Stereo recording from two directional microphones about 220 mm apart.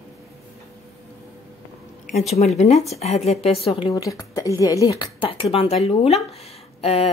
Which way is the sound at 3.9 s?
15° left (ahead or behind).